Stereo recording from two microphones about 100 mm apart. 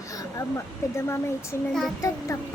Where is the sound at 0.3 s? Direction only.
30° left (ahead or behind).